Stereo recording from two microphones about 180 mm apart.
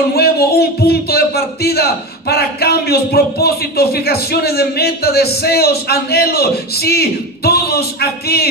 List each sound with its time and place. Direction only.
0.1 s speech: 60° left (ahead or behind)